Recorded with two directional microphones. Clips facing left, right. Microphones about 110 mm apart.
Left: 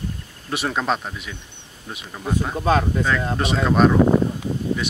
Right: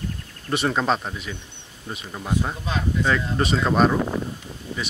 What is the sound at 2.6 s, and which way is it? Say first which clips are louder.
Speech: left 7 dB; 50° left (ahead or behind).